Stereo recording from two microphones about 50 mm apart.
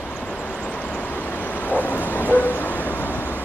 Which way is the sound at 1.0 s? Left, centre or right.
Left.